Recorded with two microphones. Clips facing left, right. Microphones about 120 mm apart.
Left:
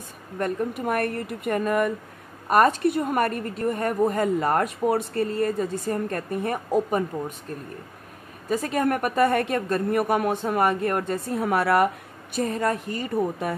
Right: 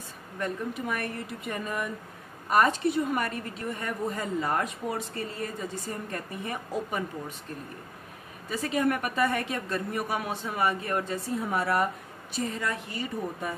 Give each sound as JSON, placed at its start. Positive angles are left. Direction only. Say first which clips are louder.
{"t": 0.4, "sound": "a woman's voice", "louder": "left 6 dB", "side_deg": 55}
{"t": 8.5, "sound": "a woman's voice", "louder": "left 4 dB", "side_deg": 45}
{"t": 12.4, "sound": "a woman's voice", "louder": "left 7 dB", "side_deg": 50}